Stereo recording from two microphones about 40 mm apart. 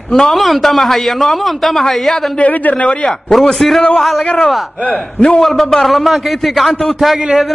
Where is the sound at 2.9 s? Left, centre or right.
Left.